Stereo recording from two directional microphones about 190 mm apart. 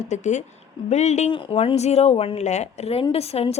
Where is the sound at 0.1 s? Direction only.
40° left (ahead or behind).